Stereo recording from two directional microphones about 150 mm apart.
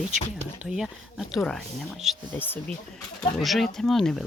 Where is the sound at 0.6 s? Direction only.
5° right (ahead or behind).